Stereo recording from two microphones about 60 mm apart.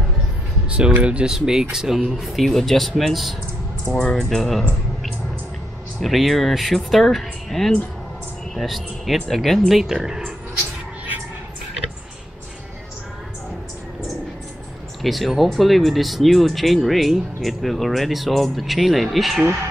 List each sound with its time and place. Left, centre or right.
0.7 s speech: centre
1.3 s speech: centre
3.8 s speech: centre
4.3 s speech: centre
5.9 s speech: centre
15.0 s speech: centre